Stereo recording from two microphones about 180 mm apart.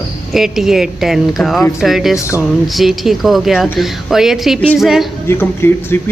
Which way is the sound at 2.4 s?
Centre (ahead or behind).